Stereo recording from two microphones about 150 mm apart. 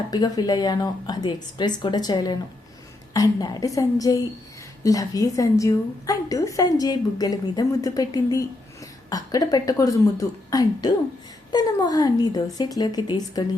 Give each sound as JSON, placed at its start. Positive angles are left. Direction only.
{"t": 0.1, "sound": "a woman's voice", "side_deg": 25}